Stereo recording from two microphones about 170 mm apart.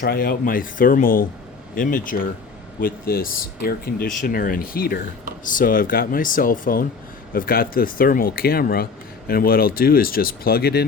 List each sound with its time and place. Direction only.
0.0 s speech: 60° left (ahead or behind)